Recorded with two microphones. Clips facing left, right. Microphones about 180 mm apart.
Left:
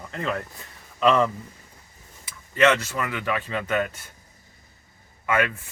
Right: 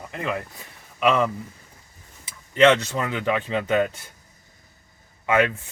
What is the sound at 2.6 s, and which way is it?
Speech, 20° right (ahead or behind).